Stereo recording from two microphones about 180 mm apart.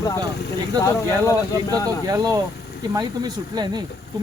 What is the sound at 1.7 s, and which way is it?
Speech, 20° right (ahead or behind).